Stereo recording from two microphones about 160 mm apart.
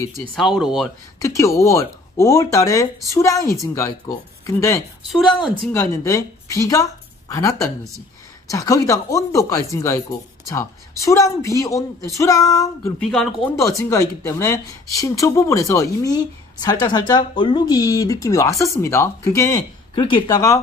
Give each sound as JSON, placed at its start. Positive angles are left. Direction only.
{"t": 0.3, "sound": "speech", "side_deg": 0}
{"t": 1.2, "sound": "speech", "side_deg": 20}
{"t": 5.1, "sound": "speech", "side_deg": 0}
{"t": 5.7, "sound": "speech", "side_deg": 20}
{"t": 13.0, "sound": "speech", "side_deg": 0}
{"t": 13.6, "sound": "speech", "side_deg": 20}